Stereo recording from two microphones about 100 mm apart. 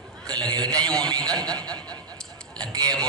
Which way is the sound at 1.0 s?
40° right (ahead or behind).